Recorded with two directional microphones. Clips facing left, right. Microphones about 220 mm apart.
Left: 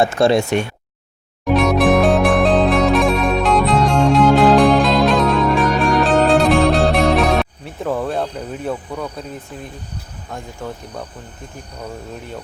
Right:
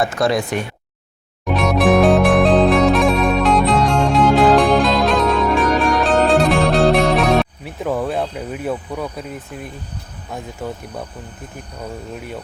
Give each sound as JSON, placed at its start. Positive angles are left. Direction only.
{"t": 0.0, "sound": "speech", "side_deg": 25}
{"t": 1.5, "sound": "music", "side_deg": 0}
{"t": 10.3, "sound": "speech", "side_deg": -5}